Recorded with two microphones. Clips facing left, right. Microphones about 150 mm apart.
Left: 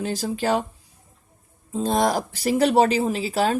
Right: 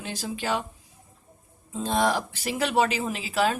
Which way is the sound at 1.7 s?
40° left (ahead or behind).